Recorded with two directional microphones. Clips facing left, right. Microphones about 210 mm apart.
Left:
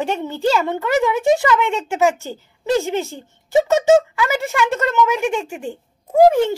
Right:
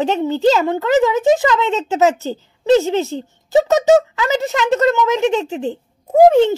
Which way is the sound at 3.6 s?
15° right (ahead or behind).